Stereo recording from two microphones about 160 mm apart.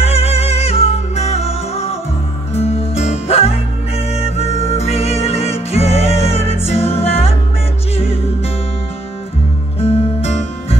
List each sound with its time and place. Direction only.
0.0 s music: 40° left (ahead or behind)
9.8 s music: 40° left (ahead or behind)